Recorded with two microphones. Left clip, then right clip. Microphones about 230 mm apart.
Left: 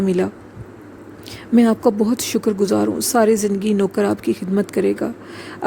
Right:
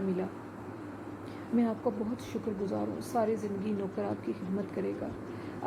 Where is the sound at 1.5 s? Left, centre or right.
Left.